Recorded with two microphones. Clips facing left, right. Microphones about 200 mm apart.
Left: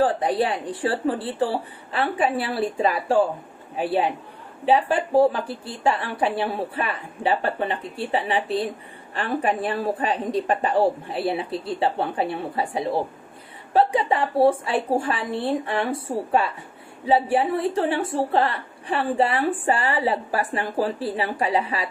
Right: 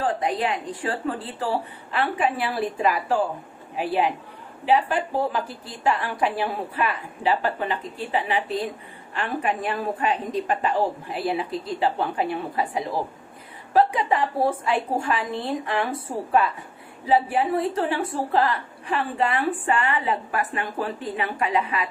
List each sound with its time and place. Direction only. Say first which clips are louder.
0.0 s a woman's voice: left 4 dB; 30° left (ahead or behind)
17.1 s a woman's voice: left 1 dB; 30° left (ahead or behind)